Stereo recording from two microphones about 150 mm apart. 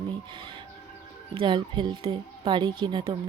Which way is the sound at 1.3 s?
35° right (ahead or behind).